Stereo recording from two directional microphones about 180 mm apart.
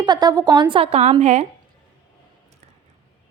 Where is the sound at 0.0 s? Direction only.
25° right (ahead or behind).